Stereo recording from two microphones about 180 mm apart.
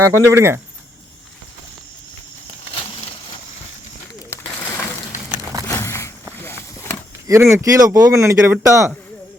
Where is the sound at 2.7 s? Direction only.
30° left (ahead or behind).